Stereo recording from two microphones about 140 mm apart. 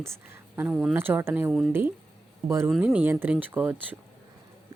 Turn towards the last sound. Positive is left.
turn(degrees=-10)  # may be behind; listen again after turning